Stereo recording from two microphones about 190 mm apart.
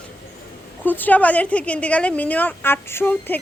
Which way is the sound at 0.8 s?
10° left (ahead or behind).